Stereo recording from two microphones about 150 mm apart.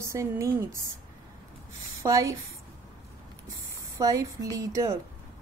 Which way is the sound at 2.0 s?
20° right (ahead or behind).